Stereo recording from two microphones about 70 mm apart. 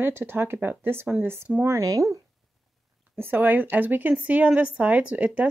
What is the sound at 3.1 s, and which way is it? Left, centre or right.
A woman's voice, right.